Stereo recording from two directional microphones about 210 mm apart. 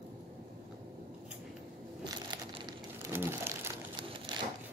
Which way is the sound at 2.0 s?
20° right (ahead or behind).